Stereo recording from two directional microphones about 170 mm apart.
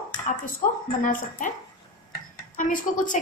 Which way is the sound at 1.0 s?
50° left (ahead or behind).